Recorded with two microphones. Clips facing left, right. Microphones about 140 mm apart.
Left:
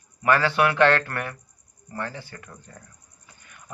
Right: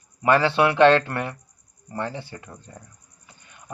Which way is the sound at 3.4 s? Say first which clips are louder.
Even; 20° right (ahead or behind).